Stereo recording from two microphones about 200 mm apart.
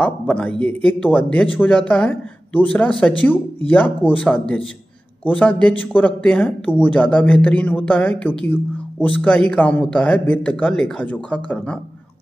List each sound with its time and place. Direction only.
0.0 s a man's voice: 5° left (ahead or behind)